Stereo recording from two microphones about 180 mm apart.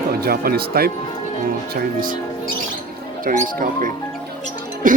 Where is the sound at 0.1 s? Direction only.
60° right (ahead or behind).